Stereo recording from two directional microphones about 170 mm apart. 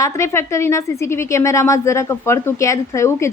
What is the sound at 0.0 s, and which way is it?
A woman's voice, 15° left (ahead or behind).